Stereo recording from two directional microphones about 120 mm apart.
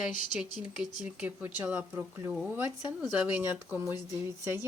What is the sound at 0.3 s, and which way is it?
A woman's voice, 5° right (ahead or behind).